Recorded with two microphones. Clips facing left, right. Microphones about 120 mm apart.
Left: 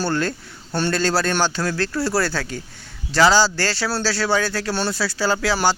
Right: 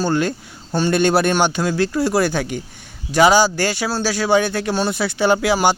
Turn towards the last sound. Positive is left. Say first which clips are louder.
# right 4 dB
turn(degrees=-15)  # may be behind; listen again after turning